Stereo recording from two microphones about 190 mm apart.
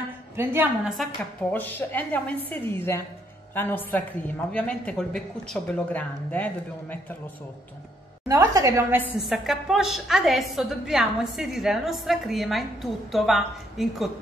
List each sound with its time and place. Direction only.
0.4 s a woman's voice: 10° right (ahead or behind)
1.5 s a woman's voice: 10° left (ahead or behind)
8.3 s a woman's voice: 20° right (ahead or behind)
9.3 s a woman's voice: centre (ahead or behind)